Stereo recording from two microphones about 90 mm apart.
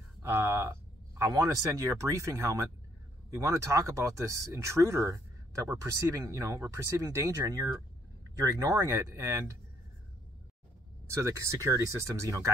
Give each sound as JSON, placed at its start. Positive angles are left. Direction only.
{"t": 0.2, "sound": "speech", "side_deg": -30}
{"t": 11.1, "sound": "speech", "side_deg": -35}